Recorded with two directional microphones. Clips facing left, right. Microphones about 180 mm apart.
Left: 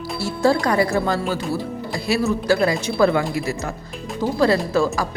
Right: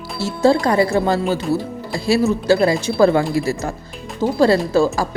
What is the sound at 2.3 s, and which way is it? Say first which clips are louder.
Speech: right 2 dB; 25° right (ahead or behind).